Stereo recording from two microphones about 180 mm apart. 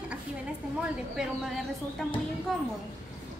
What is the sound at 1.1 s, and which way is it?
Speech, centre (ahead or behind).